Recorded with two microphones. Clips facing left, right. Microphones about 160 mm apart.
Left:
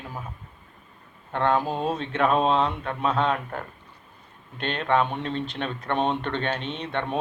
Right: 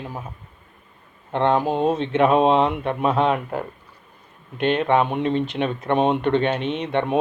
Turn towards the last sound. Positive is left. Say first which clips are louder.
# right 7 dB
turn(degrees=-15)  # may be behind; listen again after turning